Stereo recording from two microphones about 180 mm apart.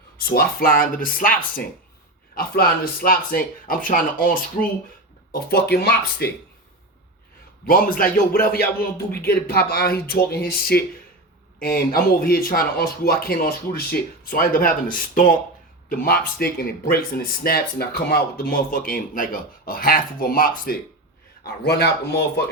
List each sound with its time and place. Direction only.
0.3 s speech: 55° left (ahead or behind)
7.7 s speech: 50° left (ahead or behind)
21.4 s speech: 65° left (ahead or behind)